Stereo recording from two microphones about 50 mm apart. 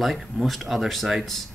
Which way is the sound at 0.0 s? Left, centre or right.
Centre.